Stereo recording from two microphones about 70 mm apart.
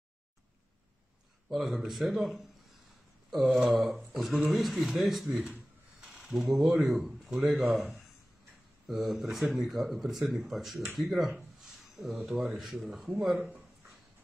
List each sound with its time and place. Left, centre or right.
1.5 s speech: centre
3.5 s speech: centre
5.4 s a sound: centre
6.0 s speech: centre